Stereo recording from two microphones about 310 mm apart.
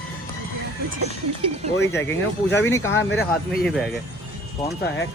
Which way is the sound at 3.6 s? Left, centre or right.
Centre.